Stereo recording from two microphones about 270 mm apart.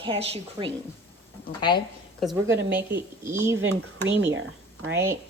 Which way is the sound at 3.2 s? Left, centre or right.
Centre.